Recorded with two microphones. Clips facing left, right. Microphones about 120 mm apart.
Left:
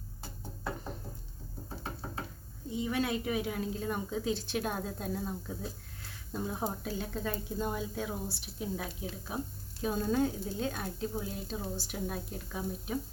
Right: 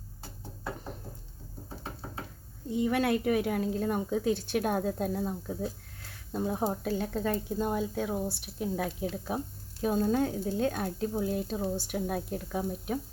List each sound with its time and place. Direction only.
2.6 s speech: 65° right (ahead or behind)